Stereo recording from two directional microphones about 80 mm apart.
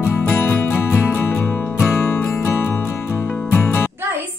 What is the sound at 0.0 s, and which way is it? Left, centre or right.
Music, left.